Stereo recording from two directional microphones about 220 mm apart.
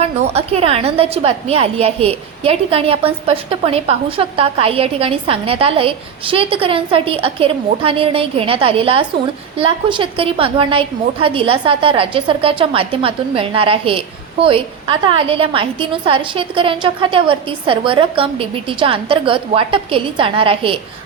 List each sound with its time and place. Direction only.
0.0 s a woman's voice: 25° right (ahead or behind)